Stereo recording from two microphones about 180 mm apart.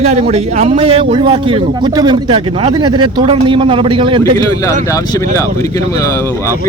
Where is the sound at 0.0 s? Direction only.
35° right (ahead or behind).